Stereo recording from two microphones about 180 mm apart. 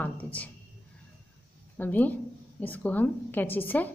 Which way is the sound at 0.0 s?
10° left (ahead or behind).